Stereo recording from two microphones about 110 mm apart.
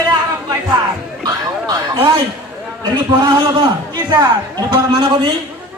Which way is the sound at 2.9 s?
45° right (ahead or behind).